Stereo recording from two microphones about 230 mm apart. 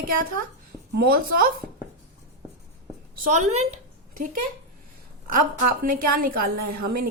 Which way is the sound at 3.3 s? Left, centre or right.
Right.